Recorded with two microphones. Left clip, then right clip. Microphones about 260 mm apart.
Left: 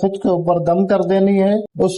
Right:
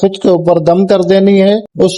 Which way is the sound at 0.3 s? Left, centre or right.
Right.